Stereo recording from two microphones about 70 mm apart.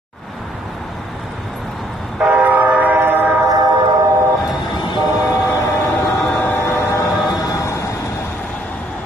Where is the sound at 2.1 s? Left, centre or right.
Centre.